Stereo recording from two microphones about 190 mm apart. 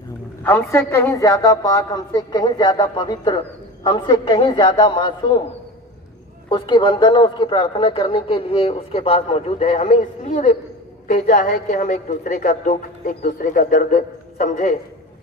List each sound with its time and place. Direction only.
0.4 s a woman's voice: 10° left (ahead or behind)
6.5 s a woman's voice: 25° left (ahead or behind); by 14.8 s 45° left (ahead or behind)